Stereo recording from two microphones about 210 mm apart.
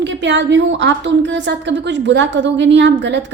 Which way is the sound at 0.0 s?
55° right (ahead or behind).